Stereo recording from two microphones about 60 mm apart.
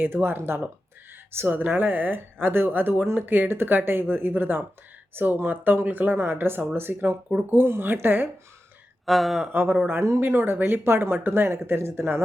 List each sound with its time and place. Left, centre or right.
0.0 s speech: right
9.0 s speech: centre
9.5 s speech: right